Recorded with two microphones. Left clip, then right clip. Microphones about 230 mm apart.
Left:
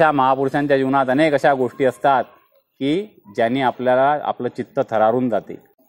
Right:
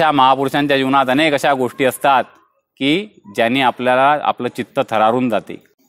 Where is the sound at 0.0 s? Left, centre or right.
Right.